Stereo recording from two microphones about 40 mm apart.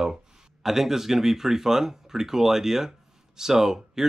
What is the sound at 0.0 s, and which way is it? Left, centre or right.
Speech, centre.